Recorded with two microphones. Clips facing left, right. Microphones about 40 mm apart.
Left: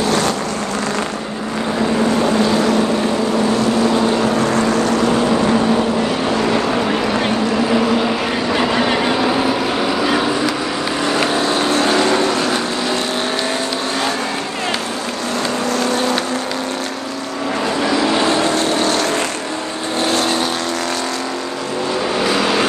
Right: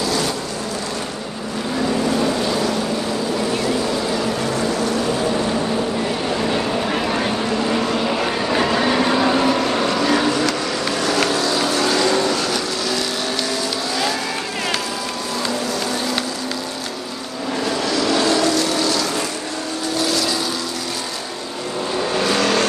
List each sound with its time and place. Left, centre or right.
0.0 s vehicle: left
4.1 s boat: left
7.9 s vehicle: centre
8.8 s vehicle: left
9.1 s vehicle: centre; by 12.6 s left
15.6 s a sound: left
17.8 s vehicle: left
22.2 s vehicle: centre